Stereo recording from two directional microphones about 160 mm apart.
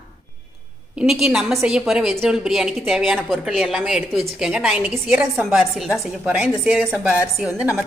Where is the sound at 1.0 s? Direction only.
5° right (ahead or behind).